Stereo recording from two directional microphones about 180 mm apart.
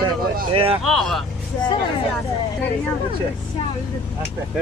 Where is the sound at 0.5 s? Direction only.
30° right (ahead or behind).